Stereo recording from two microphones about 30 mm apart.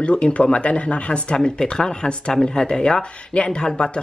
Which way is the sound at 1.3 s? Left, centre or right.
Left.